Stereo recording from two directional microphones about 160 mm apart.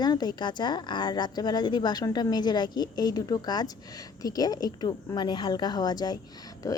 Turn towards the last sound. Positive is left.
turn(degrees=25)  # may be behind; listen again after turning